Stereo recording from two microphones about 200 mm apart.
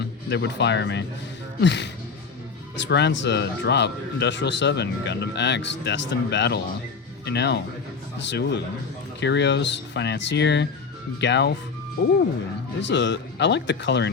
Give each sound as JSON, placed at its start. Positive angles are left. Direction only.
{"t": 0.0, "sound": "speech", "side_deg": 60}
{"t": 12.8, "sound": "speech", "side_deg": 60}